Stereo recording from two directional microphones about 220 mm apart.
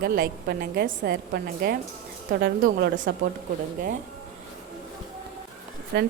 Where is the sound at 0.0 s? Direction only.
40° right (ahead or behind).